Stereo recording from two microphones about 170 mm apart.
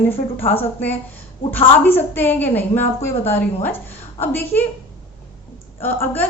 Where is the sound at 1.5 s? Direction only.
10° left (ahead or behind).